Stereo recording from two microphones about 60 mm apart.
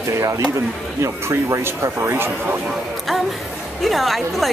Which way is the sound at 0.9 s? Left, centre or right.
Right.